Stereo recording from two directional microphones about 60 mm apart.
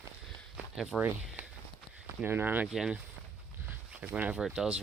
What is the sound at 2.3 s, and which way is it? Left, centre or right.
Speech, right.